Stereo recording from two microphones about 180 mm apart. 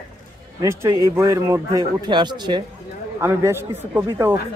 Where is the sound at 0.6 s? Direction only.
15° right (ahead or behind).